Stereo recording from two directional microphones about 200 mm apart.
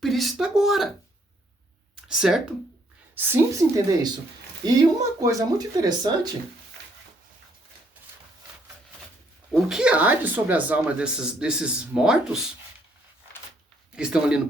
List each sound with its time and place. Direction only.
0.0 s speech: centre (ahead or behind)
2.0 s speech: centre (ahead or behind); by 6.3 s 20° right (ahead or behind)
9.5 s speech: centre (ahead or behind)
13.9 s speech: 5° right (ahead or behind)